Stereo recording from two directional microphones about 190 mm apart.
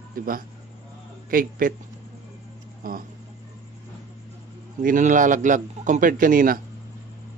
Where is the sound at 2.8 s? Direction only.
50° right (ahead or behind).